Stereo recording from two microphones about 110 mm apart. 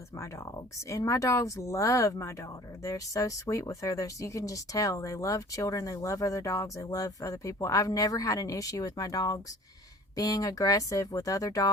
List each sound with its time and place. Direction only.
0.2 s speech: 25° left (ahead or behind)